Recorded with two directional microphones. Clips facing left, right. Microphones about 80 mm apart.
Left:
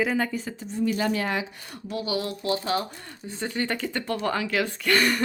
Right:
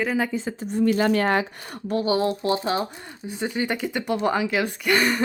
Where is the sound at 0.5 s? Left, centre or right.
Right.